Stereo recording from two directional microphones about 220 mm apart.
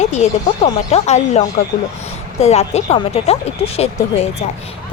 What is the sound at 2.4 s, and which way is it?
A woman's voice, 30° left (ahead or behind).